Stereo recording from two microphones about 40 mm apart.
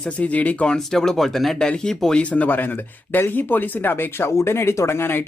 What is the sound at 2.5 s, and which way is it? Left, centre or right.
Speech, left.